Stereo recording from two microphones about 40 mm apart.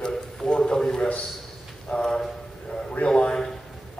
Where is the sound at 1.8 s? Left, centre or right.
Centre.